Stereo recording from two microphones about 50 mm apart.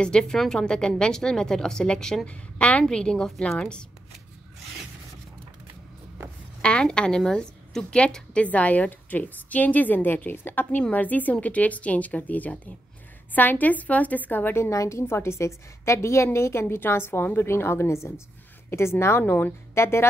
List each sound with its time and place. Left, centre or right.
0.0 s a woman's voice: centre
2.2 s a woman's voice: left; by 3.5 s centre
3.5 s a woman's voice: centre
6.6 s a woman's voice: centre; by 14.6 s left
14.6 s a woman's voice: left
15.0 s a woman's voice: left
19.2 s a woman's voice: left
19.7 s speech: left